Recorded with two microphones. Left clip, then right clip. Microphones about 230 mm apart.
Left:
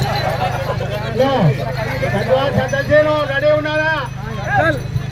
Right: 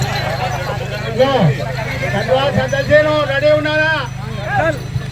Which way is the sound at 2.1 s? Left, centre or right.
Right.